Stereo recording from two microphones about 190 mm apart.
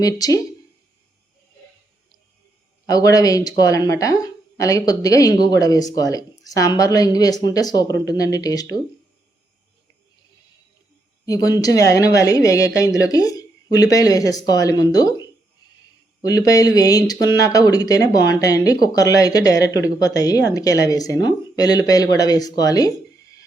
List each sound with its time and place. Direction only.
0.0 s speech: 20° left (ahead or behind)
2.8 s speech: 20° left (ahead or behind)
11.3 s speech: 20° left (ahead or behind)